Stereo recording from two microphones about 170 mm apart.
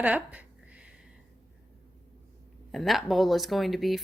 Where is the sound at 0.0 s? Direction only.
10° right (ahead or behind).